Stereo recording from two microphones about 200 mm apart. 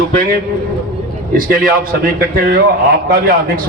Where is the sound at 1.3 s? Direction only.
45° right (ahead or behind).